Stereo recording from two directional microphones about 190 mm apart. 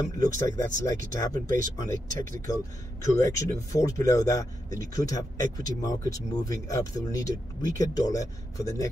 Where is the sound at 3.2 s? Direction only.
15° left (ahead or behind).